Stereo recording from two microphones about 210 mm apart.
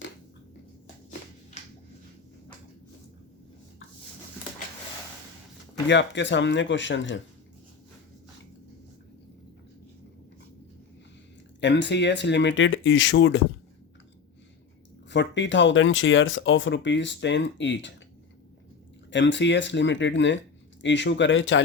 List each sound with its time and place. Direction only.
5.9 s speech: 60° left (ahead or behind)
11.6 s speech: 55° left (ahead or behind)
15.1 s speech: 60° left (ahead or behind)
19.1 s speech: 60° left (ahead or behind)